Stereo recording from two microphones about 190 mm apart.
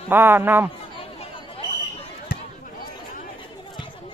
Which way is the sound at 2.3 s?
55° left (ahead or behind).